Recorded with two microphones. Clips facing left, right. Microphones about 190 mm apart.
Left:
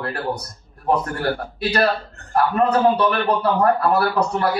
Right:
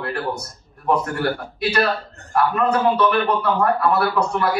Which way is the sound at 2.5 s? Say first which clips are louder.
Left 3 dB; 35° left (ahead or behind).